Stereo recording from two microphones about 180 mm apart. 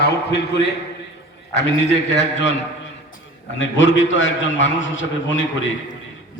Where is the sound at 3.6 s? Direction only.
90° left.